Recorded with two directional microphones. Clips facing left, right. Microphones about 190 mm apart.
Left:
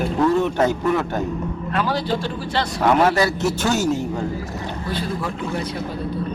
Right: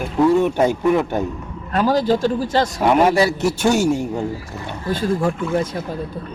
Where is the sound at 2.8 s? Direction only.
15° right (ahead or behind).